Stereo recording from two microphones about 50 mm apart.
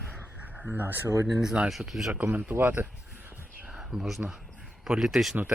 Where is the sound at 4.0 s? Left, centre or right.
Centre.